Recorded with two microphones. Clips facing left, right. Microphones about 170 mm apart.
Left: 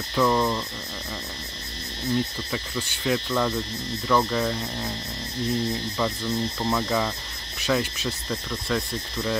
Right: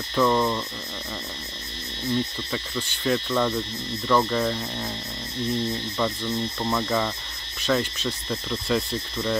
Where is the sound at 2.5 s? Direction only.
5° left (ahead or behind).